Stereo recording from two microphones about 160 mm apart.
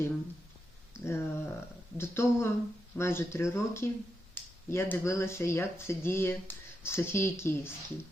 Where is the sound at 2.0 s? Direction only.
15° left (ahead or behind).